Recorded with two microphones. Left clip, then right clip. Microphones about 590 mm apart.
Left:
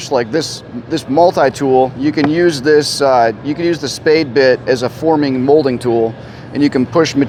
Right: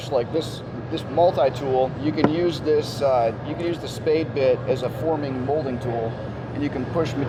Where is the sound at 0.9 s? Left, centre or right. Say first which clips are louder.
Left 8 dB; left.